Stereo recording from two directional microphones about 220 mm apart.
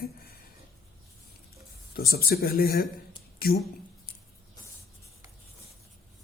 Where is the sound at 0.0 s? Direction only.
45° left (ahead or behind).